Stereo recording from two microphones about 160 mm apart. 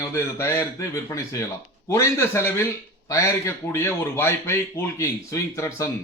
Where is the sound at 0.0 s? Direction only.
15° left (ahead or behind).